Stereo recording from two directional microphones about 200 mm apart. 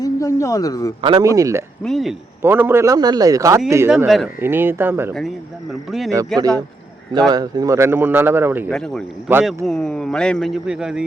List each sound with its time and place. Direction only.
0.0 s speech: 15° left (ahead or behind)
1.0 s speech: 20° right (ahead or behind)
1.8 s speech: centre (ahead or behind)
2.4 s speech: 10° right (ahead or behind)
8.7 s speech: 5° left (ahead or behind)